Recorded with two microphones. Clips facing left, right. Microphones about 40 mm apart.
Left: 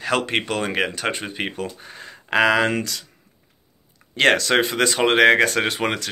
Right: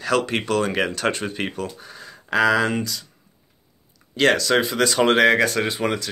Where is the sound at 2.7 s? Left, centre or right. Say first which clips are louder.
Left 1 dB; left.